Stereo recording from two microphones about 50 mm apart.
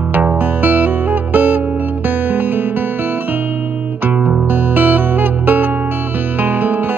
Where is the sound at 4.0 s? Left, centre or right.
Right.